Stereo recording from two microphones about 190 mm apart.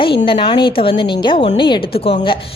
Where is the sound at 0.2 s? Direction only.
25° left (ahead or behind).